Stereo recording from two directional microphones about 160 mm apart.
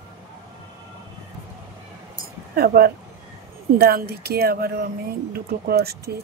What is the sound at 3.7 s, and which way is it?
Speech, 80° right.